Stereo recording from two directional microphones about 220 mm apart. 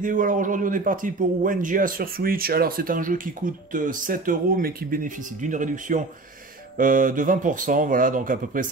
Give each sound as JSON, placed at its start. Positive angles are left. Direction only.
{"t": 0.0, "sound": "a man's voice", "side_deg": -35}